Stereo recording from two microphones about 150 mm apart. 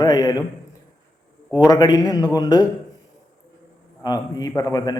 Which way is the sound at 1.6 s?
25° left (ahead or behind).